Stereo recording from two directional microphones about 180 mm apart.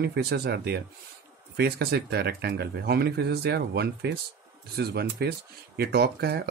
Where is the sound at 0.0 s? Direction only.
60° right (ahead or behind).